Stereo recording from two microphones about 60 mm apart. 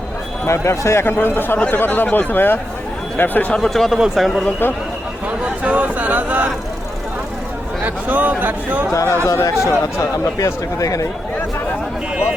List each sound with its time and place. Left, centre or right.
0.4 s a man's voice: left
1.1 s speech: left
3.7 s speech: centre
3.9 s speech: centre
5.6 s a sound: right
7.9 s speech: right
8.9 s speech: left